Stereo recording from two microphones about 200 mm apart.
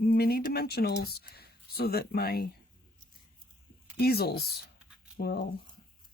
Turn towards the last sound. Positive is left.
turn(degrees=50)  # may be behind; listen again after turning